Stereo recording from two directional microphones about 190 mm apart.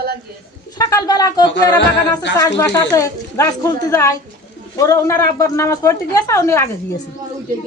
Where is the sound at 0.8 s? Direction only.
20° left (ahead or behind).